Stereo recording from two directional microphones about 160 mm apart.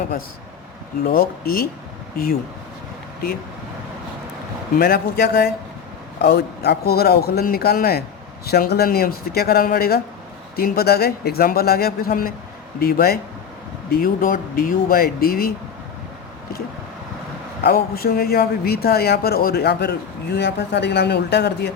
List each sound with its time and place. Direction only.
1.0 s a man's voice: 65° left (ahead or behind)
4.7 s a man's voice: 70° left (ahead or behind)
17.6 s speech: 70° left (ahead or behind); by 21.7 s 90° left